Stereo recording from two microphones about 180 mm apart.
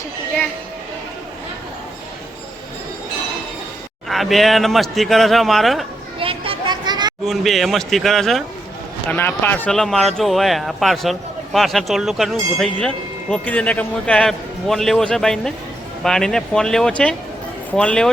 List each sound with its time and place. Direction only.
4.1 s speech: centre (ahead or behind)
6.1 s children playing: 30° right (ahead or behind)
7.3 s speech: centre (ahead or behind)
9.0 s speech: 10° left (ahead or behind)